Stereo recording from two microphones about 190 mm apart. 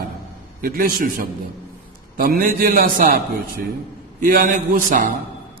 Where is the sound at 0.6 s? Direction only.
50° right (ahead or behind).